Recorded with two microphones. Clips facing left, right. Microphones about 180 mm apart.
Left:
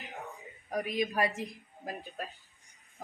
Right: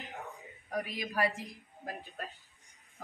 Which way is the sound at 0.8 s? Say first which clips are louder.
Left 4 dB; 25° left (ahead or behind).